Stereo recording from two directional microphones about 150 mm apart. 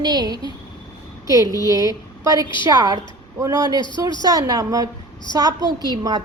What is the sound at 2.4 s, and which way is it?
Speech, 30° left (ahead or behind).